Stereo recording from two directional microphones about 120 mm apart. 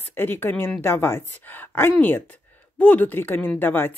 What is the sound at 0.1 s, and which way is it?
A woman's voice, 15° left (ahead or behind).